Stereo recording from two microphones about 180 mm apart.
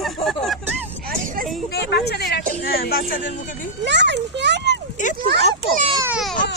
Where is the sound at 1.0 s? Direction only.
50° right (ahead or behind).